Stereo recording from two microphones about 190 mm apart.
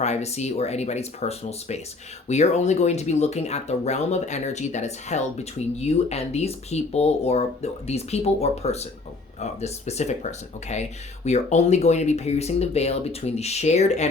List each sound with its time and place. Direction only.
0.0 s speech: 35° left (ahead or behind)